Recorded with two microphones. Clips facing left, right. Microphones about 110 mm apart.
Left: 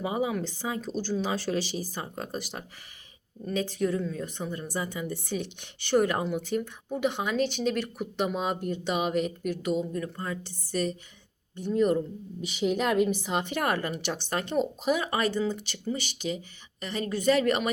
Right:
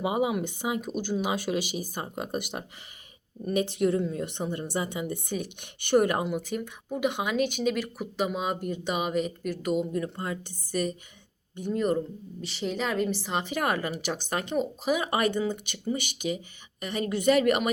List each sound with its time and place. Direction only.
0.0 s speech: 20° right (ahead or behind)
3.4 s a woman's voice: 20° right (ahead or behind); by 9.8 s 5° right (ahead or behind)
9.9 s speech: 20° right (ahead or behind)
11.7 s a woman's voice: centre (ahead or behind)